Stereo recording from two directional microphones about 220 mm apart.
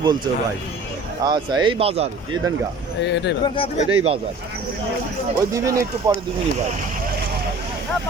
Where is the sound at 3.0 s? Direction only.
55° left (ahead or behind).